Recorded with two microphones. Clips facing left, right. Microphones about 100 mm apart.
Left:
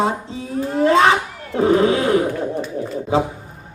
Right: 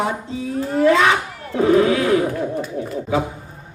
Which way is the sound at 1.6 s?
25° left (ahead or behind).